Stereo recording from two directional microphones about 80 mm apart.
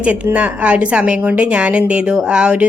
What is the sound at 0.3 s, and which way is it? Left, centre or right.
Speech, centre.